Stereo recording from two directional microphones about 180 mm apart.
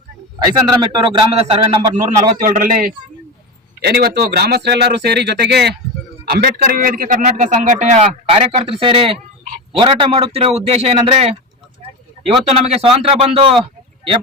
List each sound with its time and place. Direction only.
0.3 s a man's voice: 25° right (ahead or behind)
2.0 s a man's voice: 50° right (ahead or behind)
3.8 s speech: 65° right (ahead or behind)
6.3 s a man's voice: 55° right (ahead or behind); by 13.6 s 30° right (ahead or behind)